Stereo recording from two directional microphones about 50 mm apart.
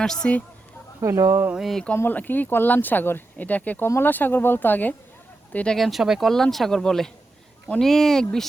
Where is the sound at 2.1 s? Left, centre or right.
Left.